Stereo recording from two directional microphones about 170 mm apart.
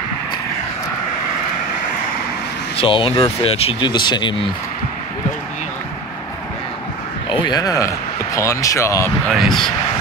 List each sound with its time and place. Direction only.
2.8 s speech: 30° left (ahead or behind)
7.2 s a man's voice: 25° left (ahead or behind)
9.3 s speech: centre (ahead or behind)